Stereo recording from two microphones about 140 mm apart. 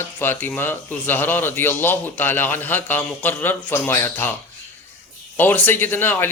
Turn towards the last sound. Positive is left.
turn(degrees=15)  # may be behind; listen again after turning